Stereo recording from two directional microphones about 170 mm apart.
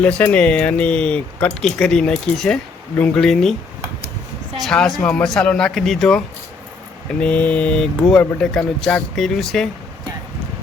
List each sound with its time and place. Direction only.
0.0 s speech: 10° left (ahead or behind)
4.6 s speech: centre (ahead or behind)